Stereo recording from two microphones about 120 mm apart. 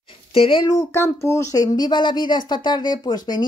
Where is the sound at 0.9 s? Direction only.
25° left (ahead or behind).